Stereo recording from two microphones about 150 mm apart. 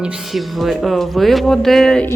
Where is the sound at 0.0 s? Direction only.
Centre (ahead or behind).